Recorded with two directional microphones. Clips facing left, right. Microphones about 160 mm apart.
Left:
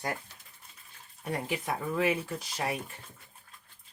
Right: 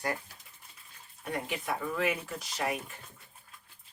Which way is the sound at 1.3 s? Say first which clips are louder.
Left 1 dB; 30° left (ahead or behind).